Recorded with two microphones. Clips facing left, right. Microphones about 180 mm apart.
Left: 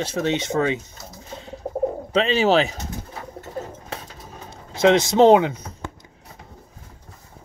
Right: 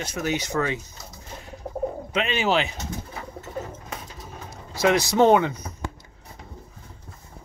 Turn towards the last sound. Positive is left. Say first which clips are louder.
# left 4 dB
turn(degrees=25)  # may be behind; listen again after turning